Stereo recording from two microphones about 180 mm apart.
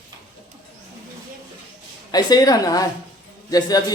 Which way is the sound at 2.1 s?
20° left (ahead or behind).